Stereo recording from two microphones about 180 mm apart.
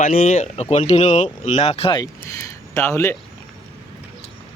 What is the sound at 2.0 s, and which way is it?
Speech, 15° left (ahead or behind).